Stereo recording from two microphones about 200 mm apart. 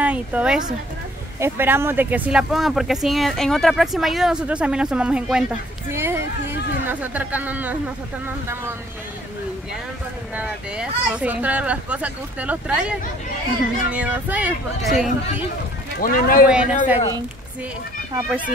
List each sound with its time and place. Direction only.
0.0 s speech: 5° right (ahead or behind)
10.3 s speech: 5° right (ahead or behind)
16.0 s speech: 45° left (ahead or behind)
16.4 s speech: 5° right (ahead or behind)